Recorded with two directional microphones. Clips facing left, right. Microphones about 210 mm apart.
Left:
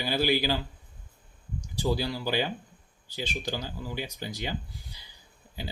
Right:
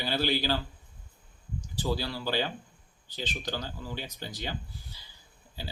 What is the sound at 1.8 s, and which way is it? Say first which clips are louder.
Speech: left 3 dB; 15° left (ahead or behind).